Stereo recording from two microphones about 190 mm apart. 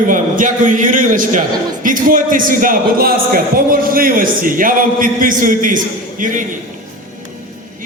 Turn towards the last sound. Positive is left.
turn(degrees=-45)  # may be behind; listen again after turning